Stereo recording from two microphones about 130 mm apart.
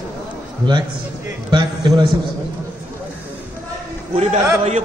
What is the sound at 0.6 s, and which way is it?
Speech, 35° right (ahead or behind).